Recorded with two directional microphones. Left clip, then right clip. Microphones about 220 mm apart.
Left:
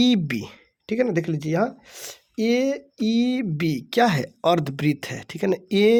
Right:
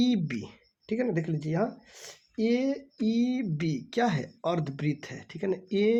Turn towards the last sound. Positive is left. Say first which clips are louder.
# left 8 dB
turn(degrees=45)  # may be behind; listen again after turning